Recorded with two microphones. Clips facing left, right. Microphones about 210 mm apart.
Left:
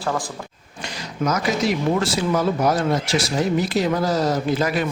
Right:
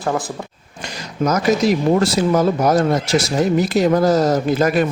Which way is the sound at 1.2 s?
40° right (ahead or behind).